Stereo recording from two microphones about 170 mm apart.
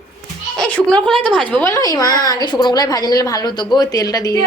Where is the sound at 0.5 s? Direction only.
5° left (ahead or behind).